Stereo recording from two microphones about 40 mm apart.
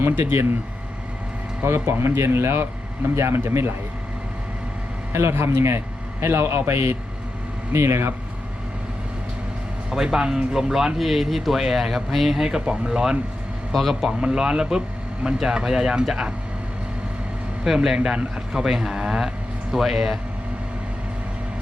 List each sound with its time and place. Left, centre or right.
0.0 s speech: right
1.6 s a man's voice: right
5.1 s a man's voice: right
9.9 s speech: centre
12.6 s speech: right
13.7 s speech: centre
14.1 s speech: right
17.8 s speech: centre